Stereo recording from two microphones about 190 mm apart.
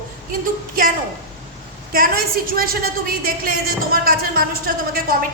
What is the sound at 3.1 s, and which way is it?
A woman's voice, 50° right (ahead or behind).